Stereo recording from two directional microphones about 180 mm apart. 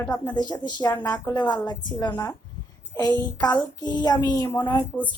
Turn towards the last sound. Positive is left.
turn(degrees=10)  # may be behind; listen again after turning